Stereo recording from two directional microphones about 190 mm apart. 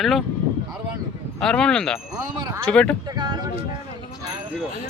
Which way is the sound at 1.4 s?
5° left (ahead or behind).